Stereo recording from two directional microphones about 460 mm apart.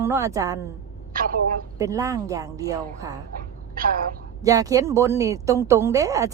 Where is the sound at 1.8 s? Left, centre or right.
Centre.